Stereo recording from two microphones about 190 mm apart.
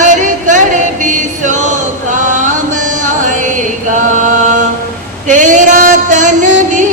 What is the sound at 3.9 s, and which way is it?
Chant, 40° right (ahead or behind).